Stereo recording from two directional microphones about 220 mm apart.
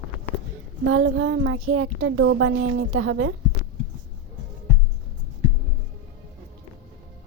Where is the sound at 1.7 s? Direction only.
70° right (ahead or behind).